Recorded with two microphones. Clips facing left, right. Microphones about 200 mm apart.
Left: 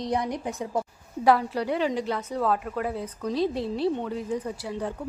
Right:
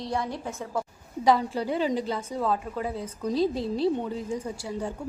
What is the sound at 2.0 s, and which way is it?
A woman's voice, centre (ahead or behind).